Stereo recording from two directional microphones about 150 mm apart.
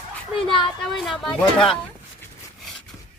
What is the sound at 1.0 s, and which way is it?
Speech, 5° left (ahead or behind).